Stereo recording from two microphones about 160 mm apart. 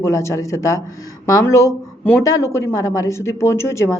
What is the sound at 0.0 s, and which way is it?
Speech, 15° left (ahead or behind).